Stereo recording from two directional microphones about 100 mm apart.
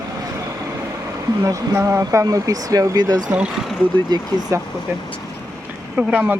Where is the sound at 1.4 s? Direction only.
30° right (ahead or behind).